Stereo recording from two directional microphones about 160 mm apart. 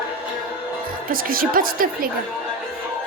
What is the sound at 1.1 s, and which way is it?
A woman's voice, 65° right (ahead or behind).